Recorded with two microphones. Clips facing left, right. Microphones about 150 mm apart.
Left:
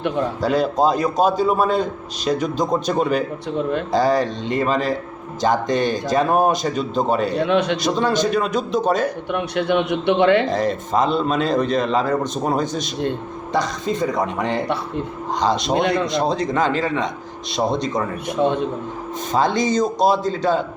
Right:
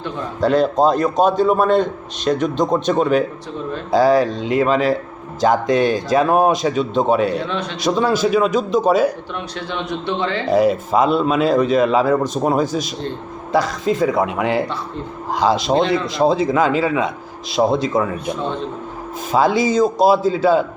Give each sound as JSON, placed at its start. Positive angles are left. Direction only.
{"t": 0.4, "sound": "a man's voice", "side_deg": 5}
{"t": 9.3, "sound": "a man's voice", "side_deg": 60}
{"t": 10.5, "sound": "a man's voice", "side_deg": -10}
{"t": 19.3, "sound": "speech", "side_deg": -5}